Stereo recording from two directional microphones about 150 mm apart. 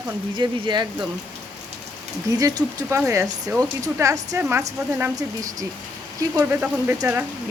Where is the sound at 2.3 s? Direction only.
25° right (ahead or behind).